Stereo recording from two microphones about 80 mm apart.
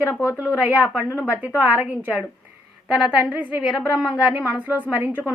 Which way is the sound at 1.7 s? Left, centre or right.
Right.